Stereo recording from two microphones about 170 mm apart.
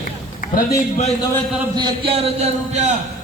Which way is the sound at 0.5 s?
45° left (ahead or behind).